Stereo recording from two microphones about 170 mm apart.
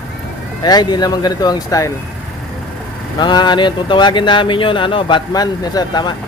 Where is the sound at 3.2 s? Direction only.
25° left (ahead or behind).